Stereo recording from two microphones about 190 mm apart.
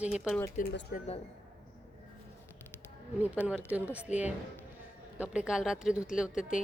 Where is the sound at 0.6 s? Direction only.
60° left (ahead or behind).